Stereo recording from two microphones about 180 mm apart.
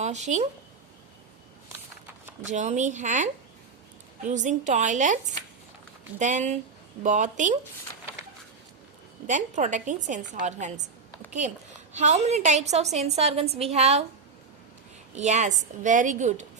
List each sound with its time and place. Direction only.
0.0 s speech: 40° right (ahead or behind)
2.5 s a woman's voice: 40° right (ahead or behind)
4.3 s a woman's voice: 45° right (ahead or behind)
9.2 s a woman's voice: 45° right (ahead or behind)
11.9 s a woman's voice: 40° right (ahead or behind)
15.1 s a woman's voice: 40° right (ahead or behind)